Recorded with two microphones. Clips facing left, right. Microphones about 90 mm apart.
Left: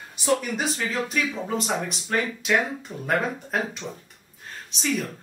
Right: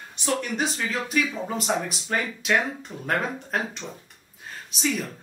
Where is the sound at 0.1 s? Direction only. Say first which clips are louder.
Left 3 dB; 5° left (ahead or behind).